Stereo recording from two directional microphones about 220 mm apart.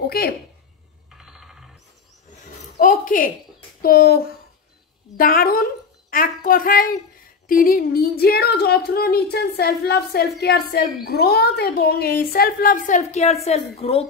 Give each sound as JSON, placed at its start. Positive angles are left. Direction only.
{"t": 0.0, "sound": "a sound", "side_deg": 45}
{"t": 1.1, "sound": "ratchet", "side_deg": 0}
{"t": 2.8, "sound": "a child's voice", "side_deg": 40}